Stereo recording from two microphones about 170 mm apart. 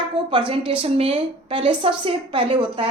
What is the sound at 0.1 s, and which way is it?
A woman's voice, 30° right (ahead or behind).